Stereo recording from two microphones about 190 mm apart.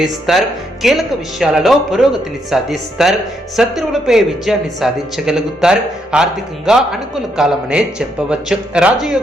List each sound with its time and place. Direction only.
0.0 s speech: centre (ahead or behind)